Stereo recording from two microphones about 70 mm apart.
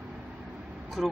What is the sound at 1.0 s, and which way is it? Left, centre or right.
Speech, centre.